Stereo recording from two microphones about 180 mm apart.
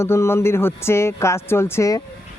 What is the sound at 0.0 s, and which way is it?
Speech, 15° left (ahead or behind).